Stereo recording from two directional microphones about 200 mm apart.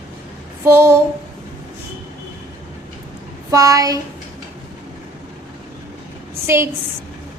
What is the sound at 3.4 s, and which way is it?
Speech, 15° right (ahead or behind).